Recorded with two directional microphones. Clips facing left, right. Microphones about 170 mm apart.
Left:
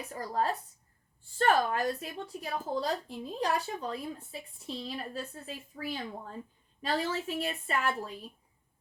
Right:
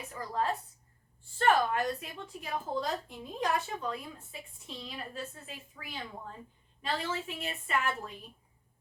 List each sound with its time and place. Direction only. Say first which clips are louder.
0.0 s a woman's voice: left 2 dB; 40° left (ahead or behind)